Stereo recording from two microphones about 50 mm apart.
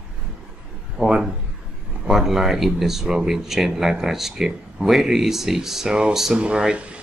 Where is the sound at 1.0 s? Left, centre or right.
Centre.